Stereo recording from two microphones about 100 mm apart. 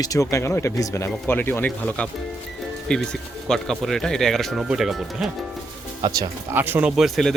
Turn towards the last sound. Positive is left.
turn(degrees=0)  # may be behind; listen again after turning